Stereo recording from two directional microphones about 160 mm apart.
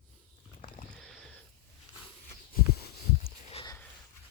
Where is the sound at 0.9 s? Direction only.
Centre (ahead or behind).